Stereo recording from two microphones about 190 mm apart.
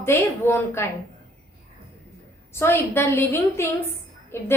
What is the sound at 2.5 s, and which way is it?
A woman's voice, 10° left (ahead or behind).